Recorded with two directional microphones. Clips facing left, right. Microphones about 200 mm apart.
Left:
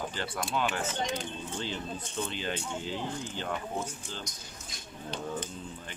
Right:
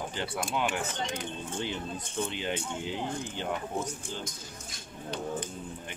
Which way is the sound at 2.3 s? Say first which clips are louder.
Right 1 dB; 15° right (ahead or behind).